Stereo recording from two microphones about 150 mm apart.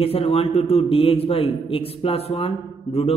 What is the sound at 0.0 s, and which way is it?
A man's voice, 40° left (ahead or behind).